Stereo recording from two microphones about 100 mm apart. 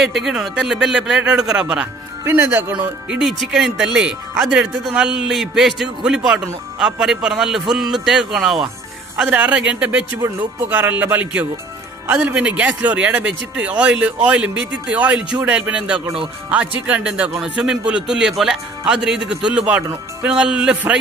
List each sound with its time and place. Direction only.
0.0 s speech: 5° right (ahead or behind)
2.2 s speech: 20° right (ahead or behind)
2.7 s a man's voice: 10° right (ahead or behind)
9.2 s speech: 15° right (ahead or behind)